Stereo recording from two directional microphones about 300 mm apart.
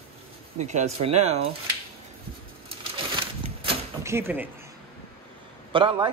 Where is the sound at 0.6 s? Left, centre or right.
Right.